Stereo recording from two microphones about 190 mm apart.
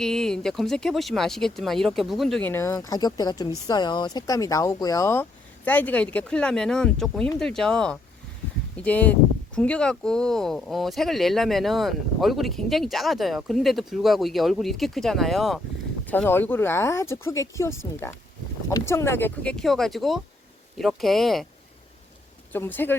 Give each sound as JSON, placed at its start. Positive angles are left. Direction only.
{"t": 0.0, "sound": "speech", "side_deg": 5}
{"t": 2.5, "sound": "speech", "side_deg": 15}
{"t": 22.5, "sound": "speech", "side_deg": 10}